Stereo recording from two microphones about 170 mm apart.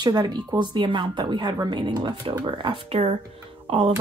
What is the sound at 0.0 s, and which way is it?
A woman's voice, 25° right (ahead or behind).